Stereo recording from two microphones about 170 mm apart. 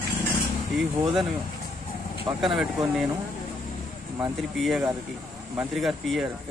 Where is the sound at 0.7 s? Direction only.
Centre (ahead or behind).